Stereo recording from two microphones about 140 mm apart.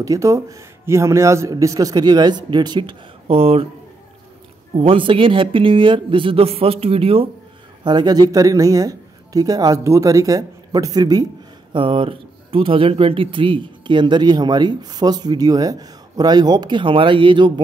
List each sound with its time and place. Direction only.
0.0 s a man's voice: 25° right (ahead or behind); by 3.6 s 45° right (ahead or behind)
4.7 s speech: 40° right (ahead or behind)
7.8 s a man's voice: 30° right (ahead or behind)
11.7 s speech: 40° right (ahead or behind)